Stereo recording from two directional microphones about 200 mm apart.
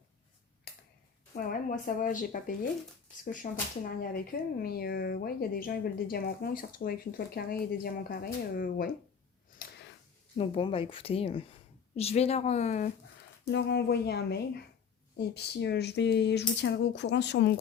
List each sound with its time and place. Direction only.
0.7 s a sound: 50° left (ahead or behind)
1.4 s speech: 45° left (ahead or behind)
3.4 s speech: 35° left (ahead or behind)
4.1 s speech: 50° left (ahead or behind)
9.6 s a sound: 45° left (ahead or behind)
10.3 s a woman's voice: 30° left (ahead or behind)
13.5 s speech: 60° left (ahead or behind)